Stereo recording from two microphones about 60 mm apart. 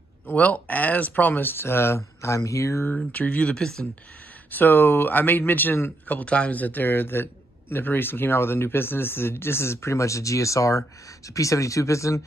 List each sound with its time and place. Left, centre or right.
0.3 s speech: left
2.9 s speech: left
3.5 s speech: centre
4.5 s speech: left